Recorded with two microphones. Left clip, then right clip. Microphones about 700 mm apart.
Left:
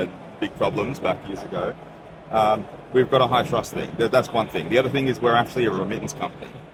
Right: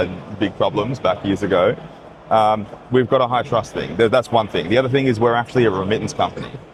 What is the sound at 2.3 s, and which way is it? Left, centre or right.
Speech, right.